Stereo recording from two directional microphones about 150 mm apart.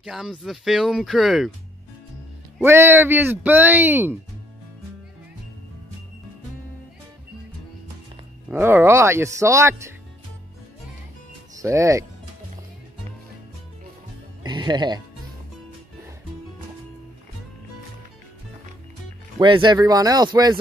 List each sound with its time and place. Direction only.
0.0 s speech: centre (ahead or behind)
2.6 s speech: 15° right (ahead or behind)
8.5 s speech: 10° right (ahead or behind)
11.6 s speech: 20° right (ahead or behind)
14.4 s music: 30° right (ahead or behind)
19.3 s speech: 35° right (ahead or behind)